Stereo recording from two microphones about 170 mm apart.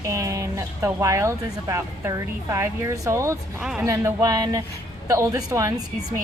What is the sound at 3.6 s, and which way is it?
Speech, 5° right (ahead or behind).